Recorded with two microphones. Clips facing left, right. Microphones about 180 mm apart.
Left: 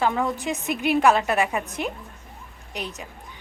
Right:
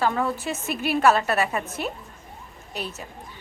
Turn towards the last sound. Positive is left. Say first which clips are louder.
# even
turn(degrees=15)  # may be behind; listen again after turning